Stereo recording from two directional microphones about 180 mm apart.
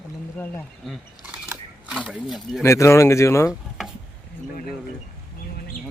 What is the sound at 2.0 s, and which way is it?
Speech, centre (ahead or behind).